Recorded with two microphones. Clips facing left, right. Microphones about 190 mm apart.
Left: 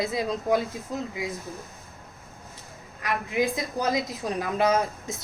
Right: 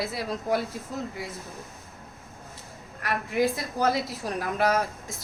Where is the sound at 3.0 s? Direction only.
15° left (ahead or behind).